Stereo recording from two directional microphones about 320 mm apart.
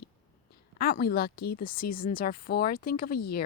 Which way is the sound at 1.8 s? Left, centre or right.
Left.